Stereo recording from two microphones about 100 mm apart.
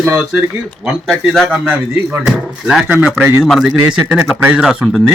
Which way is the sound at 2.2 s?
5° right (ahead or behind).